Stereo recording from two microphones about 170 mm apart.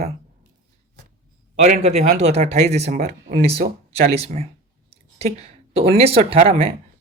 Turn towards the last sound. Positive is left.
turn(degrees=-35)  # may be behind; listen again after turning